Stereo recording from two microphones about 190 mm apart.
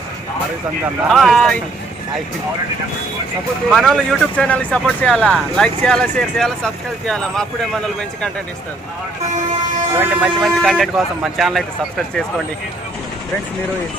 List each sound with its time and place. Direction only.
1.0 s speech: centre (ahead or behind)
3.7 s speech: centre (ahead or behind)
9.2 s speech: 40° right (ahead or behind)
9.9 s speech: 10° right (ahead or behind)